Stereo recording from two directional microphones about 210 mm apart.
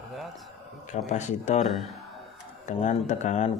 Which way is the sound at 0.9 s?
35° left (ahead or behind).